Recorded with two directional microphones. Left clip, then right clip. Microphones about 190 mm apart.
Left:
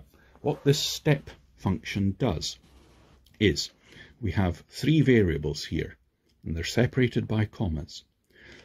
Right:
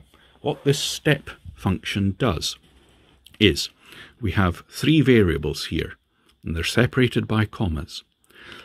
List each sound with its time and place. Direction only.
0.4 s speech: 20° right (ahead or behind)